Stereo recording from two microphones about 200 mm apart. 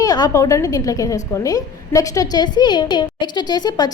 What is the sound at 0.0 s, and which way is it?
A woman's voice, 20° left (ahead or behind).